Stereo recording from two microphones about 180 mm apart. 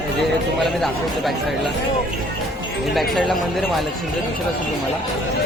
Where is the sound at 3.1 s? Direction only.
Centre (ahead or behind).